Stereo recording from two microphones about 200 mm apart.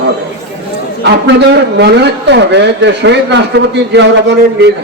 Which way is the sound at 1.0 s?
55° right (ahead or behind).